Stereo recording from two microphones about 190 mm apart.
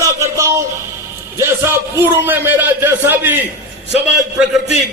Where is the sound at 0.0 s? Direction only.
15° right (ahead or behind).